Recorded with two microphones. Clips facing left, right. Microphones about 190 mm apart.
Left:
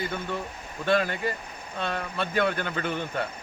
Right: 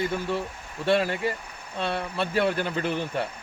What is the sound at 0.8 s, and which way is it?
A man's voice, 30° right (ahead or behind).